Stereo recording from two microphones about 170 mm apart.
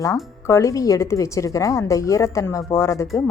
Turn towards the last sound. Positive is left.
turn(degrees=15)  # may be behind; listen again after turning